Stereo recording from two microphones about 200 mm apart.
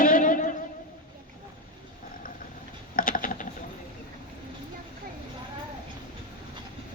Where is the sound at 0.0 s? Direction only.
45° left (ahead or behind).